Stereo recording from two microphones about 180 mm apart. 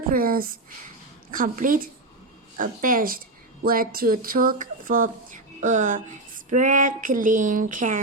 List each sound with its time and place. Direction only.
0.1 s speech: 55° right (ahead or behind)